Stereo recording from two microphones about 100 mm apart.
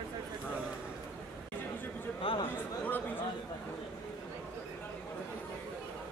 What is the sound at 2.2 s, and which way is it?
Chatter, 60° left (ahead or behind).